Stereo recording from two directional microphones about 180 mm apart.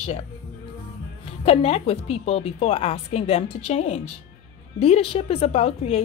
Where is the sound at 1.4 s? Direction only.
35° left (ahead or behind).